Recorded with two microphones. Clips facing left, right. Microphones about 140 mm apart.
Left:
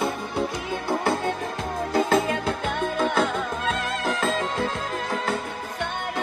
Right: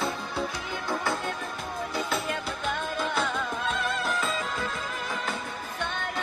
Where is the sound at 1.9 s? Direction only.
90° left.